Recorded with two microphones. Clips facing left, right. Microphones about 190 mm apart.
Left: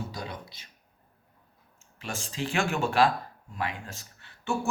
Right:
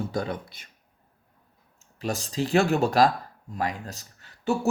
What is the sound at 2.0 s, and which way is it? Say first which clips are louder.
Speech: right 6 dB; 40° right (ahead or behind).